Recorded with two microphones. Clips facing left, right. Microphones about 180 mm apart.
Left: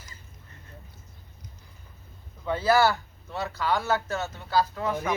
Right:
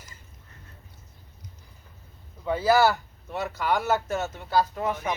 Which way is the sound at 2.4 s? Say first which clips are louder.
Right 1 dB; 10° right (ahead or behind).